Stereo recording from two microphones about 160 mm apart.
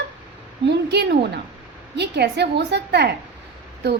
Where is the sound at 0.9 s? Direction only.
90° right.